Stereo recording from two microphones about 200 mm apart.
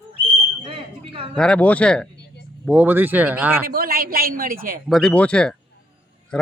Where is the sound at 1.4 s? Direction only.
5° left (ahead or behind).